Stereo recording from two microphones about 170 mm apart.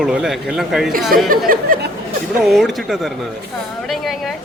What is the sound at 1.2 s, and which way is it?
Speech, 55° right (ahead or behind).